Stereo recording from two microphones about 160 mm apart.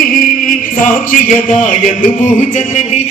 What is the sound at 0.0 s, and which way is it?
Chant, 60° left (ahead or behind).